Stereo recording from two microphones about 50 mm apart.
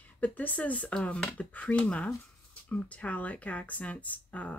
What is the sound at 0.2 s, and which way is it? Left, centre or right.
Speech, left.